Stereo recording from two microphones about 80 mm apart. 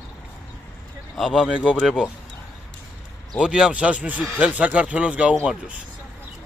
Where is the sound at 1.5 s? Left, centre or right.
Centre.